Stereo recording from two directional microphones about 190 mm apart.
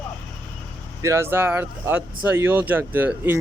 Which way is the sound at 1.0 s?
15° right (ahead or behind).